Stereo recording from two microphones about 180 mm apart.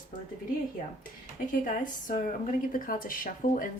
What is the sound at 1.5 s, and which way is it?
Speech, 50° left (ahead or behind).